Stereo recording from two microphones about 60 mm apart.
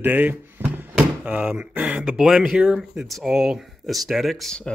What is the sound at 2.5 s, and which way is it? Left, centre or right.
Speech, right.